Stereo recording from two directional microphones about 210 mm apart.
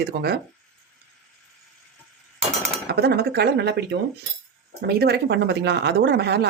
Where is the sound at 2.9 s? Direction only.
50° right (ahead or behind).